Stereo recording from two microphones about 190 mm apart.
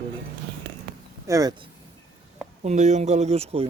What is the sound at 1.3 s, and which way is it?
Speech, 20° right (ahead or behind).